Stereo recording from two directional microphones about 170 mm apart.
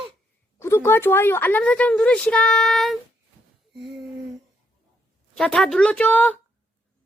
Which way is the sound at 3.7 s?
90° right.